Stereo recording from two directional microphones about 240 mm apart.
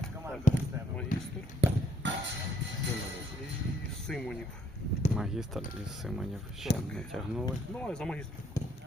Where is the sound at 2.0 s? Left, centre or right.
Right.